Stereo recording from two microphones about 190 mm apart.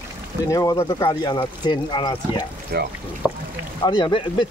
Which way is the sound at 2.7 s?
60° right (ahead or behind).